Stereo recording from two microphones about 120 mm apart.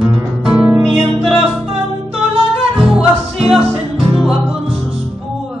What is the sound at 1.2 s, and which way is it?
Music, 55° right (ahead or behind).